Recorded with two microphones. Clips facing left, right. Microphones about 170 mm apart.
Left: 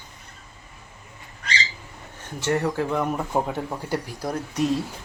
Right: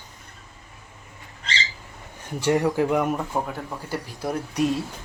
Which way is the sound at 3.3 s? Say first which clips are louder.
Left 3 dB; 20° left (ahead or behind).